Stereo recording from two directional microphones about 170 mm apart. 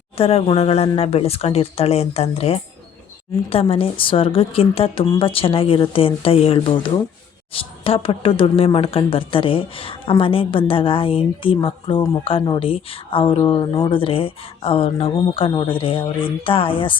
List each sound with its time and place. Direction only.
0.2 s speech: 35° left (ahead or behind)